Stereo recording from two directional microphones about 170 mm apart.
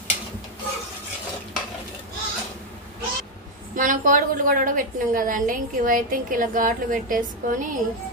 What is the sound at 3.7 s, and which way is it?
A woman's voice, 50° right (ahead or behind).